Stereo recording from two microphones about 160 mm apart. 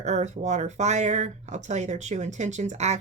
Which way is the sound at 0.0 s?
45° right (ahead or behind).